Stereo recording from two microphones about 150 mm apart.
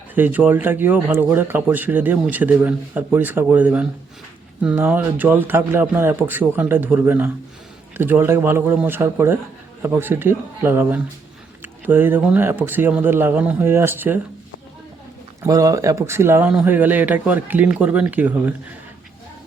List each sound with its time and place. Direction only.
0.1 s speech: 10° right (ahead or behind)
15.4 s speech: 20° right (ahead or behind)